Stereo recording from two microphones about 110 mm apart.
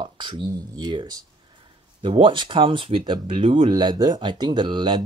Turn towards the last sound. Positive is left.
turn(degrees=-45)  # may be behind; listen again after turning